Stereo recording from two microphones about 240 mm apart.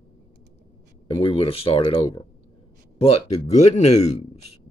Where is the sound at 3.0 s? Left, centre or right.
Left.